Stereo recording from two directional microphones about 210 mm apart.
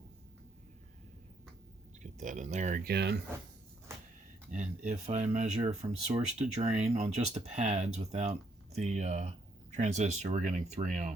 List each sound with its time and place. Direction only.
2.1 s speech: 35° right (ahead or behind); by 3.2 s 50° right (ahead or behind)
4.5 s speech: 35° right (ahead or behind)